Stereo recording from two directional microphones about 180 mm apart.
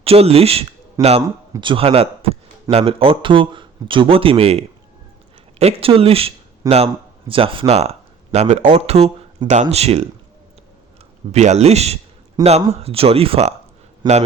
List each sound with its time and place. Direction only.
0.0 s speech: 35° right (ahead or behind)
1.0 s a man's voice: 20° right (ahead or behind)
11.3 s a man's voice: 40° right (ahead or behind)